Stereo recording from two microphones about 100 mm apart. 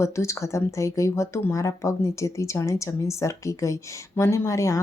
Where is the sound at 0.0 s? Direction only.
30° left (ahead or behind).